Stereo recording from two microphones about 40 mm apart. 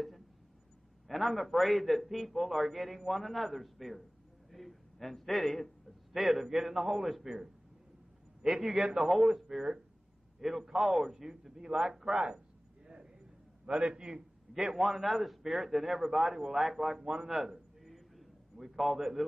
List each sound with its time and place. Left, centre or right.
1.0 s a man's voice: centre
7.0 s a man's voice: centre
8.4 s a man's voice: centre
12.8 s a sound: centre
13.7 s a man's voice: right
17.8 s a sound: centre